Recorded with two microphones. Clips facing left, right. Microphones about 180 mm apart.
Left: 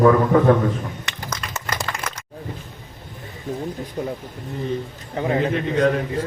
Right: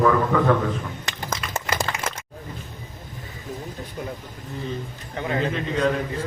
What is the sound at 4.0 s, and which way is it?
Speech, 40° left (ahead or behind).